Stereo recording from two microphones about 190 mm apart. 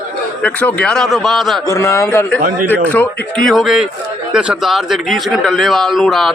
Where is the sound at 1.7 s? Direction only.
15° left (ahead or behind).